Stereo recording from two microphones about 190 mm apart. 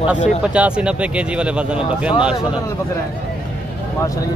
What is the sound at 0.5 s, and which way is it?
Speech, 5° right (ahead or behind).